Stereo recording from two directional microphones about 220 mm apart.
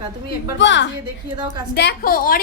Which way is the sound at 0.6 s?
55° left (ahead or behind).